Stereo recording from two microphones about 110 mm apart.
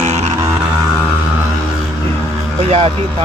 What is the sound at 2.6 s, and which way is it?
Speech, 75° right (ahead or behind).